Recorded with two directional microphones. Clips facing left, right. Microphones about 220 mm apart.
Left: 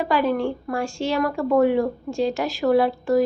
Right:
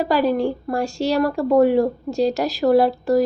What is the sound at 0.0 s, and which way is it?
A woman's voice, 35° right (ahead or behind).